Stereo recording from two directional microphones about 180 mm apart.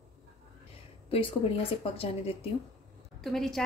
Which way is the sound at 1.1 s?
30° left (ahead or behind).